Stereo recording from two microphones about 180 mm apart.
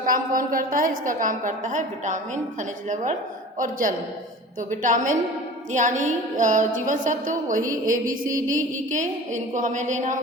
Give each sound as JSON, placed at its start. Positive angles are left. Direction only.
{"t": 0.0, "sound": "a woman's voice", "side_deg": -50}